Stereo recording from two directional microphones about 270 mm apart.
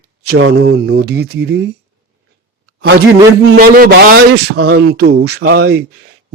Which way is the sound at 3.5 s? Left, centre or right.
Right.